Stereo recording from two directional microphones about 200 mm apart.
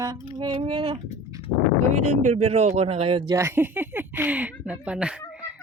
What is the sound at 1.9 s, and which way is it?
Speech, 35° right (ahead or behind).